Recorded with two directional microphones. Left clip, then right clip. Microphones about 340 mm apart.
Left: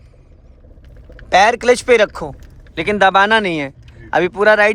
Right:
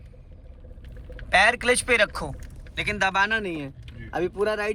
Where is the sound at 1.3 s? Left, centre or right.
Centre.